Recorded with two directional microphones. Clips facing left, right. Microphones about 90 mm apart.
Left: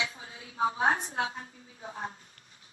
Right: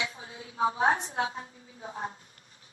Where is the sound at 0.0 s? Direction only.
30° right (ahead or behind).